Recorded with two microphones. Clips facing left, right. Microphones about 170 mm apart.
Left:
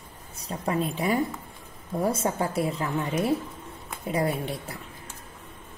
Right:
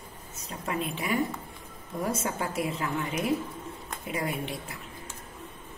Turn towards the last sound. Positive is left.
turn(degrees=35)  # may be behind; listen again after turning